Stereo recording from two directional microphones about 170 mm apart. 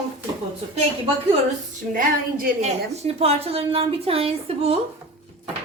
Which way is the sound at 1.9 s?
60° right (ahead or behind).